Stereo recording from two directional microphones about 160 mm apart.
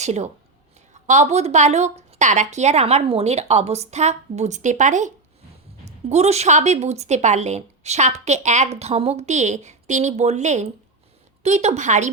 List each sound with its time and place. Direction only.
0.0 s a woman's voice: 45° right (ahead or behind)